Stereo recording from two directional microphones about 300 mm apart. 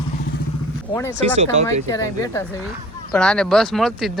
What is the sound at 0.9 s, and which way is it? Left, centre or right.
Speech, centre.